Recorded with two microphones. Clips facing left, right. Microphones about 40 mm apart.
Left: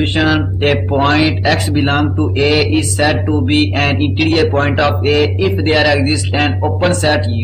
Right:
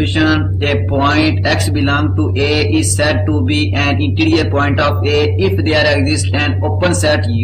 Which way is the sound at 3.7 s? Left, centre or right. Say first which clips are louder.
Left 1 dB; centre.